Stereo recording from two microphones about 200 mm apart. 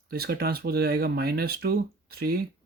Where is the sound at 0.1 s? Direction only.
50° right (ahead or behind).